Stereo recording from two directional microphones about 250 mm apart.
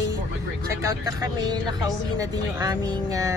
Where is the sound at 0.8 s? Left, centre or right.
Centre.